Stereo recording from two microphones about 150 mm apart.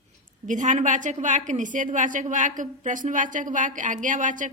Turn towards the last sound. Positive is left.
turn(degrees=-60)  # may be behind; listen again after turning